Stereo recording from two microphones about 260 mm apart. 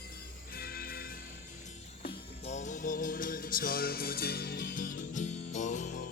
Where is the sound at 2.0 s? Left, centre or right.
Left.